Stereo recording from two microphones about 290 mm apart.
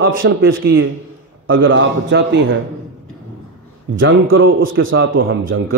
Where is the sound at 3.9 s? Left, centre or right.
Right.